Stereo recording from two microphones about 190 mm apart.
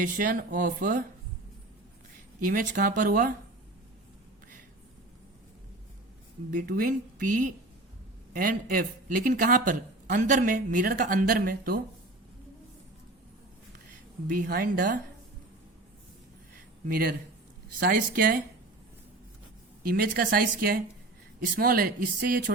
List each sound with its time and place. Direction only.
0.0 s speech: 45° right (ahead or behind)
2.4 s speech: 50° right (ahead or behind)
6.5 s speech: 45° right (ahead or behind)
14.4 s speech: 50° right (ahead or behind)
16.9 s speech: 55° right (ahead or behind)
19.8 s speech: 50° right (ahead or behind)